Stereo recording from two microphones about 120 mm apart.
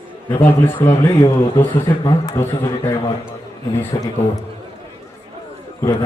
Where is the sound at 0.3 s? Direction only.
25° left (ahead or behind).